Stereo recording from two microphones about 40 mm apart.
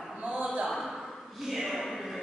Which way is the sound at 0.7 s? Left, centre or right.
Centre.